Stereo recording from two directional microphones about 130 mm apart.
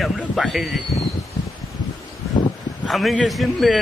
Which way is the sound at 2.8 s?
Centre (ahead or behind).